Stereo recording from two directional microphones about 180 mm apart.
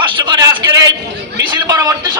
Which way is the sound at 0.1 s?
25° right (ahead or behind).